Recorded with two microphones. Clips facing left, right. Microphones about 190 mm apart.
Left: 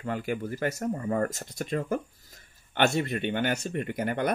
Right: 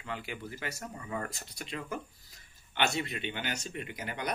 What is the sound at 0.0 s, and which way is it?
Speech, 45° left (ahead or behind).